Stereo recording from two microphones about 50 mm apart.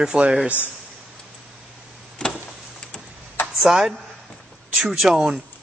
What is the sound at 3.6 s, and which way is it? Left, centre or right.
Speech, centre.